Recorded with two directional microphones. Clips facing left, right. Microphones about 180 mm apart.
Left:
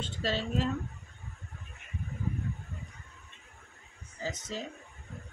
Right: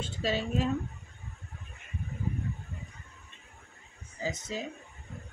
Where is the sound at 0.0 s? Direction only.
10° right (ahead or behind).